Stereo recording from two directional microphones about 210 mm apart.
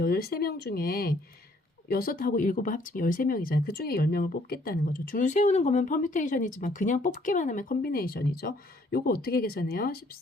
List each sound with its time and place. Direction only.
0.0 s speech: 45° left (ahead or behind)